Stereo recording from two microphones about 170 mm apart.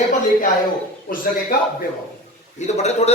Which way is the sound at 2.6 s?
40° left (ahead or behind).